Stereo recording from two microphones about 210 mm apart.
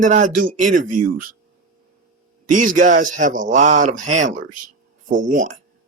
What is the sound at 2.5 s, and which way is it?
Speech, 40° right (ahead or behind).